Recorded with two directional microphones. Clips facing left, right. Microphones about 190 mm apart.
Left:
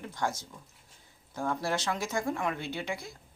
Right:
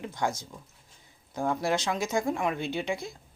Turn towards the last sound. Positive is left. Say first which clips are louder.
# right 5 dB
turn(degrees=-20)  # may be behind; listen again after turning